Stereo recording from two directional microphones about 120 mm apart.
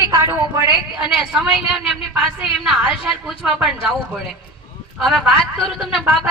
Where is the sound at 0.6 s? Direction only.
40° left (ahead or behind).